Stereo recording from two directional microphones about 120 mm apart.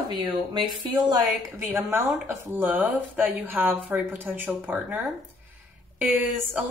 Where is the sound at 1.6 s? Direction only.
20° right (ahead or behind).